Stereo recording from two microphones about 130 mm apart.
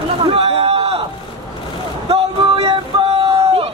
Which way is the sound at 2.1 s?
45° right (ahead or behind).